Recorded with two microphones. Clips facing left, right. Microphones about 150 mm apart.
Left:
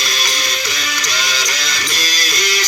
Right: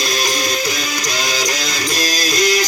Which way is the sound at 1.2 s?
45° right (ahead or behind).